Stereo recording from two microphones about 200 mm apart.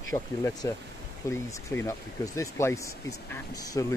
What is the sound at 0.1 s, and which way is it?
Speech, 15° left (ahead or behind).